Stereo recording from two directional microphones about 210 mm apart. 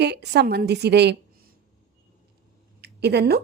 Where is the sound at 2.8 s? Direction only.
50° right (ahead or behind).